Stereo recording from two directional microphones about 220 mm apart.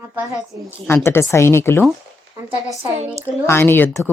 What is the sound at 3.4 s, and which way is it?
Speech, 10° left (ahead or behind).